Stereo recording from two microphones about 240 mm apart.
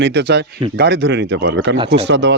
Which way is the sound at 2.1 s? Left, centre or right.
Right.